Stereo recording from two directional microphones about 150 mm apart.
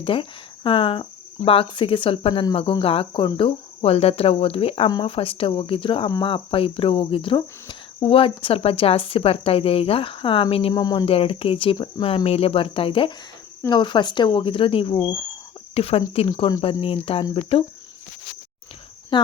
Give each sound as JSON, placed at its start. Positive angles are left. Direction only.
{"t": 0.0, "sound": "speech", "side_deg": 35}
{"t": 6.1, "sound": "speech", "side_deg": 25}
{"t": 6.3, "sound": "speech", "side_deg": 35}
{"t": 10.8, "sound": "speech", "side_deg": 25}
{"t": 11.1, "sound": "speech", "side_deg": 40}
{"t": 19.1, "sound": "cricket", "side_deg": 30}